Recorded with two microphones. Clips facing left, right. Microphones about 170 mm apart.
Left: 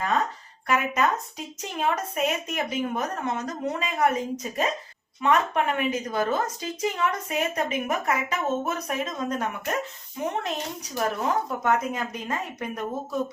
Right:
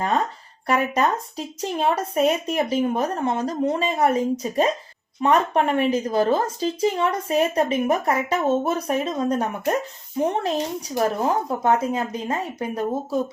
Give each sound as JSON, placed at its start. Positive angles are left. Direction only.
{"t": 0.7, "sound": "speech", "side_deg": -35}